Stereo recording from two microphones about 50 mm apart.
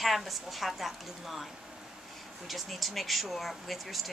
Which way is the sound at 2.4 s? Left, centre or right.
Centre.